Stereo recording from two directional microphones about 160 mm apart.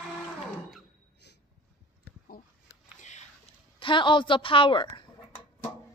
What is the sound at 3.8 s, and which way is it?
A woman's voice, 30° left (ahead or behind).